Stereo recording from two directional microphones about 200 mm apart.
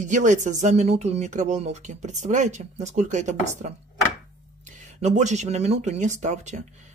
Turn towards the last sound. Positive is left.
turn(degrees=-35)  # may be behind; listen again after turning